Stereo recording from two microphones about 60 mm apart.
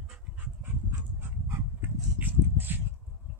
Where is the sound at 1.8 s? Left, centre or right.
Right.